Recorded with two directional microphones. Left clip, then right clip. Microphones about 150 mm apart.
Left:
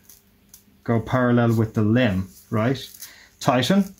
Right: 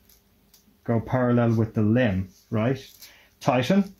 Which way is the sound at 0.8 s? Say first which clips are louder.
Left 3 dB; 15° right (ahead or behind).